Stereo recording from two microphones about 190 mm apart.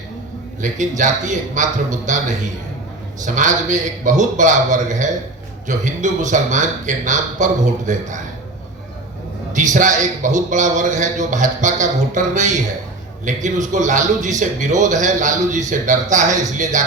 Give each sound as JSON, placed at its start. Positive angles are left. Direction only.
{"t": 0.6, "sound": "a man's voice", "side_deg": -40}
{"t": 3.2, "sound": "a man's voice", "side_deg": -40}
{"t": 9.6, "sound": "a man's voice", "side_deg": -40}